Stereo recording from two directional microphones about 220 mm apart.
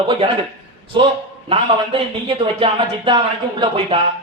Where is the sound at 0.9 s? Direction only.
20° right (ahead or behind).